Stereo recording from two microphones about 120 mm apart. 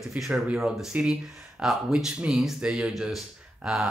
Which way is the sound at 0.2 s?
5° right (ahead or behind).